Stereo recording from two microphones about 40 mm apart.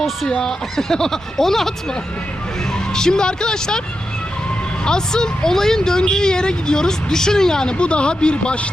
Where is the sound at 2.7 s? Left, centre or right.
Centre.